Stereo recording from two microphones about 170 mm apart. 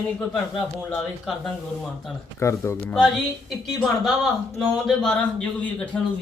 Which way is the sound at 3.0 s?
Centre (ahead or behind).